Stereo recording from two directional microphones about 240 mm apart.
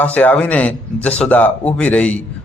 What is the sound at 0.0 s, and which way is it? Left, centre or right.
A man's voice, centre.